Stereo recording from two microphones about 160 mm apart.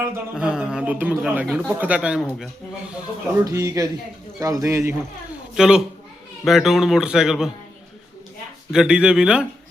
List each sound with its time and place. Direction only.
0.3 s a man's voice: 5° right (ahead or behind)
3.3 s a man's voice: 20° right (ahead or behind)
5.5 s speech: 5° right (ahead or behind)
8.7 s speech: 5° right (ahead or behind)